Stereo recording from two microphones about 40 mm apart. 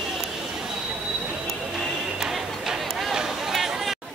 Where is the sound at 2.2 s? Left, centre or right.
Centre.